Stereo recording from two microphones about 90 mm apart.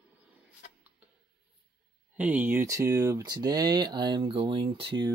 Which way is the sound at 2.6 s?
35° right (ahead or behind).